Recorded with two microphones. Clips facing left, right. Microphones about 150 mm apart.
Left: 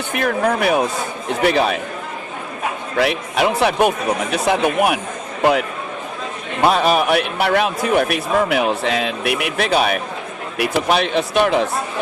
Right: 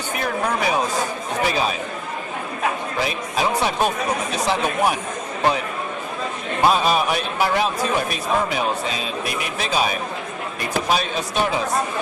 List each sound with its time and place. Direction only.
0.1 s a man's voice: 60° left (ahead or behind)
3.0 s a man's voice: 70° left (ahead or behind)
6.7 s a man's voice: 65° left (ahead or behind)